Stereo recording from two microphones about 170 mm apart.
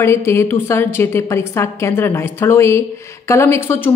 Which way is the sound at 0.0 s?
15° left (ahead or behind).